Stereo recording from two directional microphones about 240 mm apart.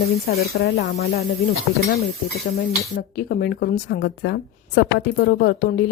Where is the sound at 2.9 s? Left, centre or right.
Left.